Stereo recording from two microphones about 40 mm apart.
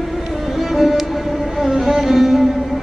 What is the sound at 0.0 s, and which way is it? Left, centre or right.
Music, centre.